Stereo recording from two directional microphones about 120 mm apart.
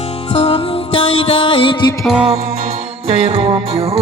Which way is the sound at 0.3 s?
50° left (ahead or behind).